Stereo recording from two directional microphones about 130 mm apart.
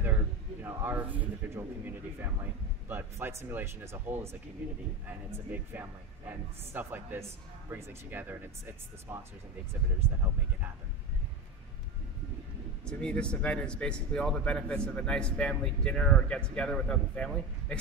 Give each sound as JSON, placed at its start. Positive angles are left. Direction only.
{"t": 0.0, "sound": "a sound", "side_deg": -15}
{"t": 2.9, "sound": "speech", "side_deg": -15}
{"t": 12.8, "sound": "speech", "side_deg": 10}